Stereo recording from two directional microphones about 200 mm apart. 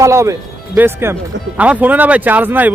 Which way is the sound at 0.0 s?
15° right (ahead or behind).